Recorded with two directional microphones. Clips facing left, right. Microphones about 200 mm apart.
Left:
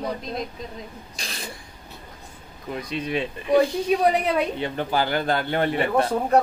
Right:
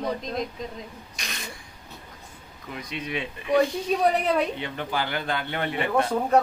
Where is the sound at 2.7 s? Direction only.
35° left (ahead or behind).